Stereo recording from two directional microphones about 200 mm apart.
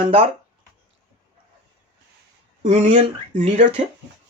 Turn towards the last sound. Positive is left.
turn(degrees=-35)  # may be behind; listen again after turning